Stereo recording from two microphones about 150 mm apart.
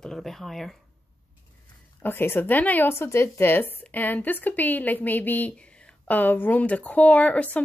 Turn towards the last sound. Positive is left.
turn(degrees=10)  # may be behind; listen again after turning